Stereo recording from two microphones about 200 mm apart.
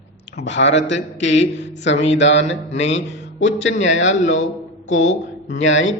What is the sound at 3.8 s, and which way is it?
A man's voice, 70° left (ahead or behind).